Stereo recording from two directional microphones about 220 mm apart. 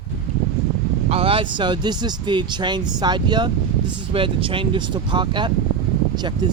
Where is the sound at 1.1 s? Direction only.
25° right (ahead or behind).